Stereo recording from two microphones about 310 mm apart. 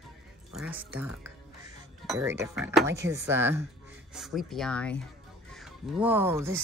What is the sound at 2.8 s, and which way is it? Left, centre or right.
Speech, right.